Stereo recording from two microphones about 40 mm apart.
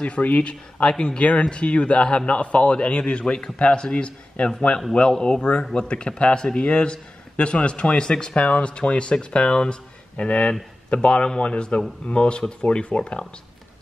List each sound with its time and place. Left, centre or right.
0.0 s a man's voice: left